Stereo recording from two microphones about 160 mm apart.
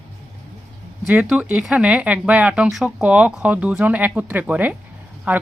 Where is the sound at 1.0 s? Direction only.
10° right (ahead or behind).